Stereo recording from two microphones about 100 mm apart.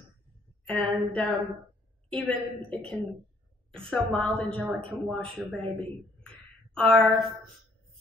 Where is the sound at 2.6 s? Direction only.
60° right (ahead or behind).